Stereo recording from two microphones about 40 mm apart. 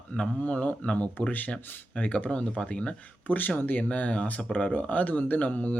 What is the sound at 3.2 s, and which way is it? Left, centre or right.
Speech, left.